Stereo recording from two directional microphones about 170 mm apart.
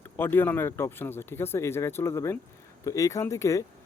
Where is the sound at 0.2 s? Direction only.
10° left (ahead or behind).